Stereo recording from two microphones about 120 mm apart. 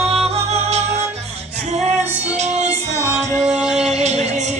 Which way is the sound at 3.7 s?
70° right (ahead or behind).